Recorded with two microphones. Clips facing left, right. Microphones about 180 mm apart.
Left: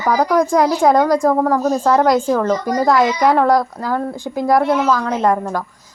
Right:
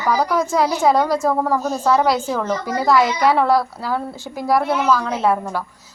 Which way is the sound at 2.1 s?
50° left (ahead or behind).